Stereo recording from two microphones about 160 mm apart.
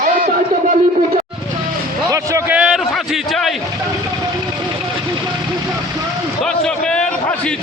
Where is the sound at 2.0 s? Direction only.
20° right (ahead or behind).